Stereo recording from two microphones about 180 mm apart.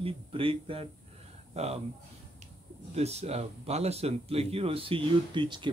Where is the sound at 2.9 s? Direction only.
35° right (ahead or behind).